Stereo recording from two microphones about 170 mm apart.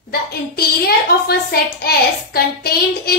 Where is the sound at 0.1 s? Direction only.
65° left (ahead or behind).